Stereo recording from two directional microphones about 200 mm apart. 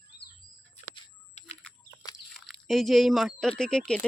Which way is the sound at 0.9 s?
35° left (ahead or behind).